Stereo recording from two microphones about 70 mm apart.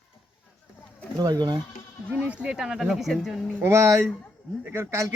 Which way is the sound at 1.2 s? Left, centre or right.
Right.